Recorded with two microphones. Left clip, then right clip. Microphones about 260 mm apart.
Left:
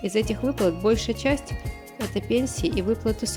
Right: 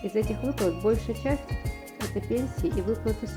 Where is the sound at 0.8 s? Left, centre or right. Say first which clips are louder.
Left 4 dB; left.